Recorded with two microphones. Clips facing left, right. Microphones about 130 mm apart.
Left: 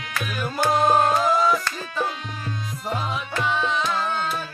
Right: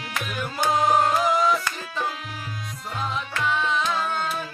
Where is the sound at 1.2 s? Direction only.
15° right (ahead or behind).